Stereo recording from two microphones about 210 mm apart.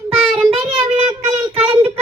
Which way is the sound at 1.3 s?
30° right (ahead or behind).